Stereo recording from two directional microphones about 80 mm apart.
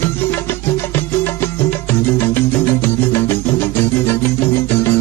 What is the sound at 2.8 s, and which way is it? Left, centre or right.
Music, left.